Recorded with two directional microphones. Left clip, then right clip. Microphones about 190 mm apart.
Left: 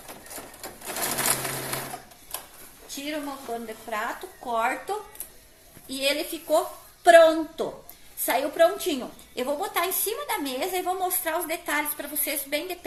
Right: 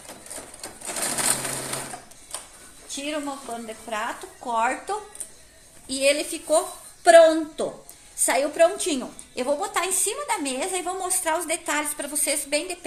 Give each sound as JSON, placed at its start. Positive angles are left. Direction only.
{"t": 0.6, "sound": "sewing machine", "side_deg": 0}
{"t": 2.9, "sound": "a woman's voice", "side_deg": -30}